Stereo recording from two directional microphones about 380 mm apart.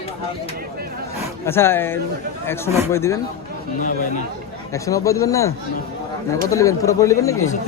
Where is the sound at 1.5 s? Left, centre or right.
Centre.